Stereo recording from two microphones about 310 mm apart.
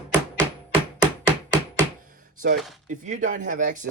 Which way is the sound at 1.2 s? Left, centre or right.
Centre.